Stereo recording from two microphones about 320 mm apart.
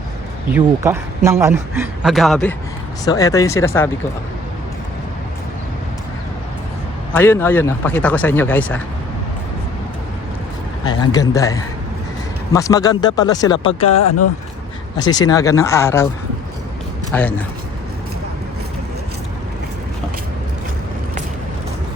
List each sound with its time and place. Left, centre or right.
0.5 s a man's voice: centre
7.1 s speech: centre
10.8 s speech: centre
13.7 s speech: left
14.9 s speech: centre
17.1 s speech: centre